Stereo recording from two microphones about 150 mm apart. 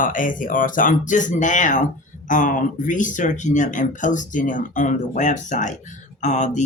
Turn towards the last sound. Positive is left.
turn(degrees=55)  # may be behind; listen again after turning